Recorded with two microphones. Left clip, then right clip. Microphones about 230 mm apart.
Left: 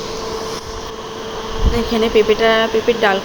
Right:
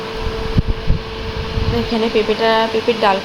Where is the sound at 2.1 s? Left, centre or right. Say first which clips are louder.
Left 2 dB; centre.